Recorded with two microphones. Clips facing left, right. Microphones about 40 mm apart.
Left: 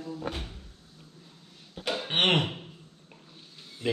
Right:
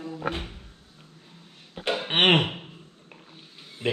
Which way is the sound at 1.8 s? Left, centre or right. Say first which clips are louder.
Right 5 dB; right.